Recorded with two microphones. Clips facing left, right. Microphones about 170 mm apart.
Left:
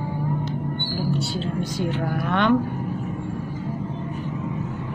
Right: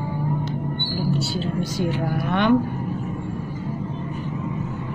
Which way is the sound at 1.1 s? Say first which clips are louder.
Right 1 dB; 5° right (ahead or behind).